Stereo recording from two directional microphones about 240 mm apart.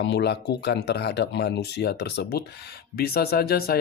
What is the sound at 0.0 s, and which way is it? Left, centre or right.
Speech, left.